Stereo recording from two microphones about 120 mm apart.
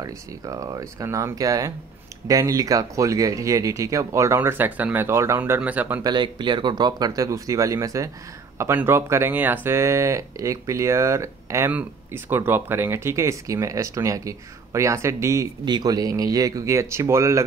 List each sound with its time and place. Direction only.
0.0 s speech: 30° right (ahead or behind)
5.4 s speech: 10° right (ahead or behind)
6.0 s speech: 40° right (ahead or behind); by 15.4 s 25° right (ahead or behind)
15.6 s speech: 35° right (ahead or behind)